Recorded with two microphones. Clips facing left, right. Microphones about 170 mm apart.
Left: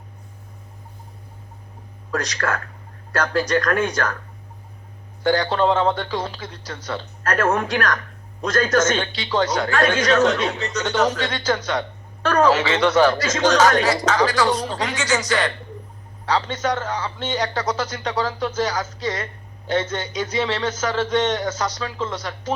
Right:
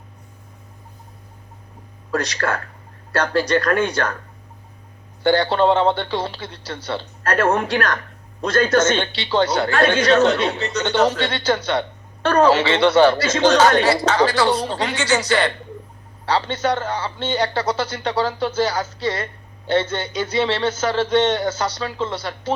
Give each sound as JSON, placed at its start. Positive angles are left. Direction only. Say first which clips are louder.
{"t": 2.1, "sound": "a man's voice", "louder": "right 2 dB", "side_deg": -30}
{"t": 5.2, "sound": "a man's voice", "louder": "right 2 dB", "side_deg": -30}